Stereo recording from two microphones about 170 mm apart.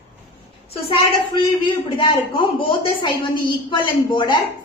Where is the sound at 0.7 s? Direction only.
35° left (ahead or behind).